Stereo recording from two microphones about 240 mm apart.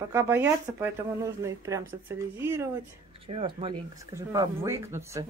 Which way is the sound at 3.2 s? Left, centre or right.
Right.